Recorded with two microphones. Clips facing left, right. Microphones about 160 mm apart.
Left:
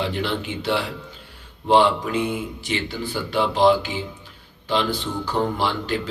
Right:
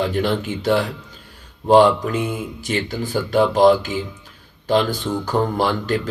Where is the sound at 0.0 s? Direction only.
45° right (ahead or behind).